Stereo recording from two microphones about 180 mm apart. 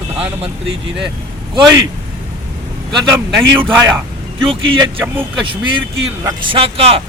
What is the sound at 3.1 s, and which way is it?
Speech, 10° right (ahead or behind).